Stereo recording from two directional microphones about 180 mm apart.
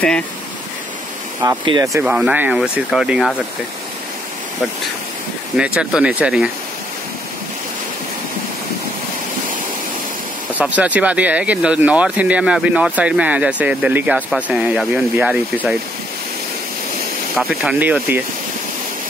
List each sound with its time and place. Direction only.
1.4 s speech: 25° right (ahead or behind)
2.0 s speech: 5° right (ahead or behind)
5.6 s speech: 5° right (ahead or behind)
10.6 s speech: 10° right (ahead or behind)
17.4 s speech: 5° right (ahead or behind)